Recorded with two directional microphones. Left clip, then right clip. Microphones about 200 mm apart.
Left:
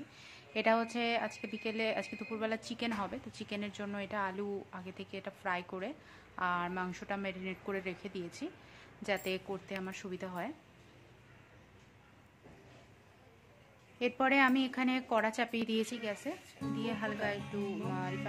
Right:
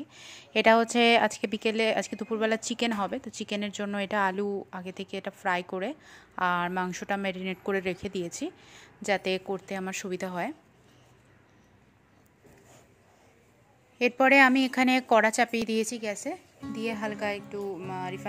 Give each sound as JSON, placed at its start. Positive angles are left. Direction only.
{"t": 0.2, "sound": "speech", "side_deg": -35}
{"t": 13.9, "sound": "speech", "side_deg": -25}